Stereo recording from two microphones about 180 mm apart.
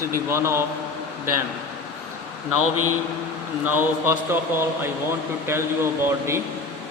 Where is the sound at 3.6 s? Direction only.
10° right (ahead or behind).